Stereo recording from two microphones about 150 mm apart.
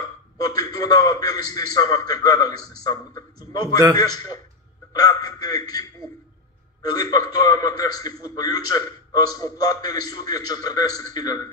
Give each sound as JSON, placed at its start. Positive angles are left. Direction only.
{"t": 0.4, "sound": "a man's voice", "side_deg": 25}
{"t": 4.9, "sound": "a man's voice", "side_deg": 25}